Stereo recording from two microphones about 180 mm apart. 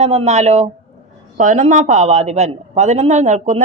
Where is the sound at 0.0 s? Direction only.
35° right (ahead or behind).